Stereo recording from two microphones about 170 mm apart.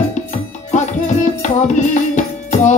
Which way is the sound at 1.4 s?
45° left (ahead or behind).